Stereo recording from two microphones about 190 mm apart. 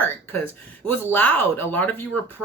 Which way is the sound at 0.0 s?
10° left (ahead or behind).